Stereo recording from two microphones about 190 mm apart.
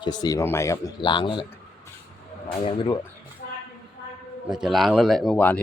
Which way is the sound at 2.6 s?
25° left (ahead or behind).